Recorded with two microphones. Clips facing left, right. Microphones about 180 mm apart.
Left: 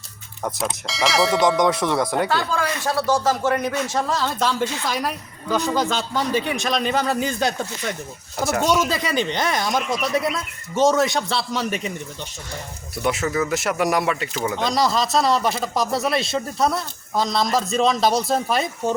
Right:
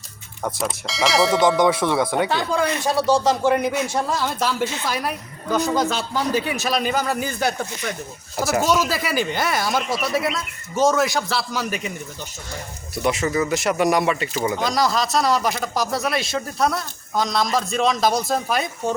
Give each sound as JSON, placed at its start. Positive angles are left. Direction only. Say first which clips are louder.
{"t": 0.4, "sound": "speech", "louder": "right 1 dB", "side_deg": 0}
{"t": 2.3, "sound": "speech", "louder": "right 2 dB", "side_deg": -20}
{"t": 7.1, "sound": "speech", "louder": "left 1 dB", "side_deg": 20}
{"t": 8.4, "sound": "speech", "louder": "even", "side_deg": -5}
{"t": 13.0, "sound": "speech", "louder": "right 1 dB", "side_deg": 0}